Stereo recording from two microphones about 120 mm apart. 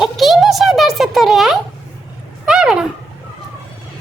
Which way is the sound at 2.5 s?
5° right (ahead or behind).